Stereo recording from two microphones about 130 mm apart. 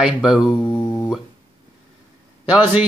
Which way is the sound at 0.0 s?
5° right (ahead or behind).